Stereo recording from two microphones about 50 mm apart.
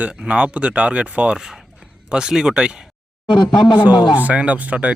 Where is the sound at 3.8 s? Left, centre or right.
Right.